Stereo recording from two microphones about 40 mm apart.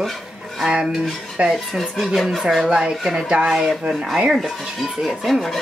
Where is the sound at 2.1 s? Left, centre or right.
Centre.